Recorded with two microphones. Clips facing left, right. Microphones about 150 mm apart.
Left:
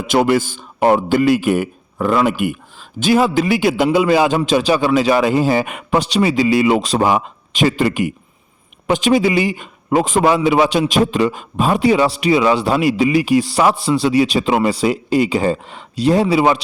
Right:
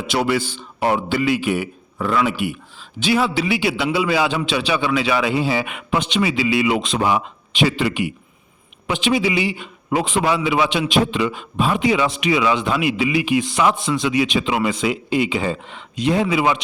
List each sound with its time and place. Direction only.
0.1 s a man's voice: 50° left (ahead or behind)